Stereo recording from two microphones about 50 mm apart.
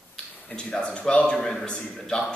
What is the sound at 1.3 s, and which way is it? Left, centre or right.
A man's voice, centre.